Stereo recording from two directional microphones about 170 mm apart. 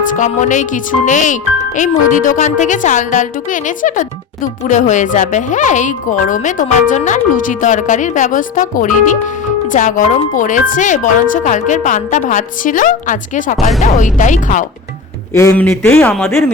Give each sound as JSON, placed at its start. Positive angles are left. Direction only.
{"t": 0.2, "sound": "speech", "side_deg": 45}
{"t": 15.3, "sound": "a man's voice", "side_deg": 15}